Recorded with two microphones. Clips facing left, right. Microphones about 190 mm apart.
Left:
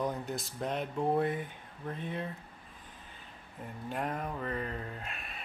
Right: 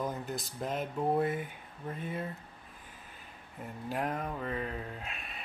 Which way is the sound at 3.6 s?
5° right (ahead or behind).